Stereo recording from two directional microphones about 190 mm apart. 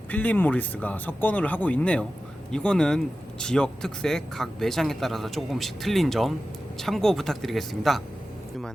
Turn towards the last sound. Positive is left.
turn(degrees=0)  # may be behind; listen again after turning